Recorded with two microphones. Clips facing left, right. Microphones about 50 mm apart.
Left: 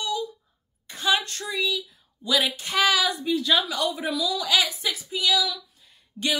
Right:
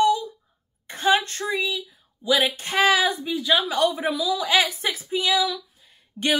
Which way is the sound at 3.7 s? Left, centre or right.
Right.